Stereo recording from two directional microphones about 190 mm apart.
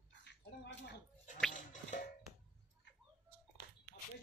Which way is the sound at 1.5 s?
40° left (ahead or behind).